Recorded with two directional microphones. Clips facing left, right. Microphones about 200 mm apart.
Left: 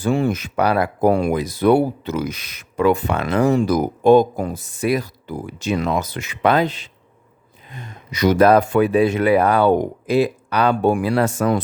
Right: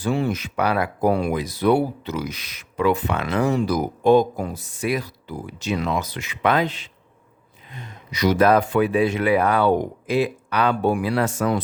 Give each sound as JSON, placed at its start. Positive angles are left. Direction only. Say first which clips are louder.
{"t": 0.0, "sound": "speech", "louder": "left 4 dB", "side_deg": 50}
{"t": 7.7, "sound": "speech", "louder": "left 2 dB", "side_deg": 50}